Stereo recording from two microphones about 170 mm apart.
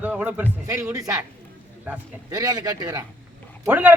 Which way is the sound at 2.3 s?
25° right (ahead or behind).